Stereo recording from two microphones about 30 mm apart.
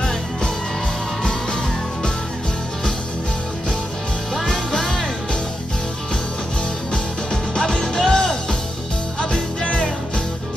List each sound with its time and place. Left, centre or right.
4.5 s music: centre
7.5 s music: left